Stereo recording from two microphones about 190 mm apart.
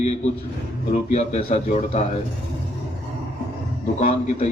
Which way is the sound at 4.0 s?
40° left (ahead or behind).